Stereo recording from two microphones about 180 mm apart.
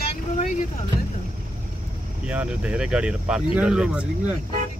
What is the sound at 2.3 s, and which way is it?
Speech, 5° right (ahead or behind).